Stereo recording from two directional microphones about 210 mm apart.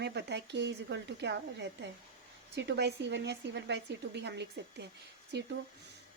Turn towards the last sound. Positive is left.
turn(degrees=-55)  # may be behind; listen again after turning